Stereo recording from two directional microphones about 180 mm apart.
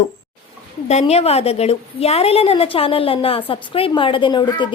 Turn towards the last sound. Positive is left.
turn(degrees=25)  # may be behind; listen again after turning